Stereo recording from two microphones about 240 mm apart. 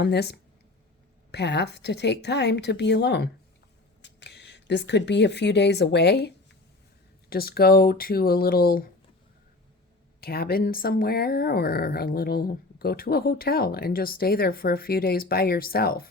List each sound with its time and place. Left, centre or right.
0.0 s a woman's voice: left
10.2 s speech: left